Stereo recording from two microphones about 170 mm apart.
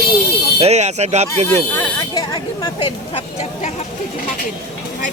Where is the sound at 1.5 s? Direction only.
15° left (ahead or behind); by 3.7 s 35° left (ahead or behind).